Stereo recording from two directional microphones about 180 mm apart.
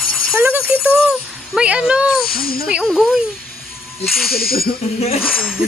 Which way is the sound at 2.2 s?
55° left (ahead or behind).